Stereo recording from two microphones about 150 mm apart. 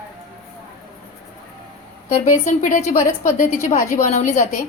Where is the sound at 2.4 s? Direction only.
55° left (ahead or behind).